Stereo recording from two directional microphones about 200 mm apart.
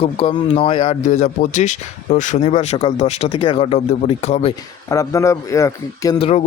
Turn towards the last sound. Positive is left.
turn(degrees=30)  # may be behind; listen again after turning